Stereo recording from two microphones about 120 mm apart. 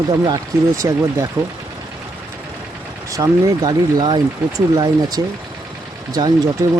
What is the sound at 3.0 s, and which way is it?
Speech, 30° right (ahead or behind).